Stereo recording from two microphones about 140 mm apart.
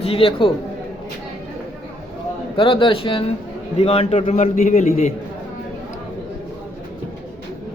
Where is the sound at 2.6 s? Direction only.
35° left (ahead or behind); by 5.1 s 55° left (ahead or behind).